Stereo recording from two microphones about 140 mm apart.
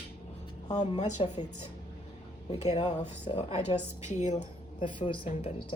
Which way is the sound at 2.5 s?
50° left (ahead or behind).